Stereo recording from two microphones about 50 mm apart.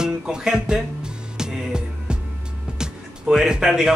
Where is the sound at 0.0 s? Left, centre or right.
Centre.